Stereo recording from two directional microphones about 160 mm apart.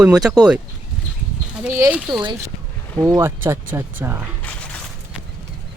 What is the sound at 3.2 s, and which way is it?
Speech, 15° right (ahead or behind).